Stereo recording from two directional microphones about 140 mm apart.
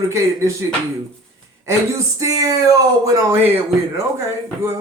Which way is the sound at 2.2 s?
25° right (ahead or behind).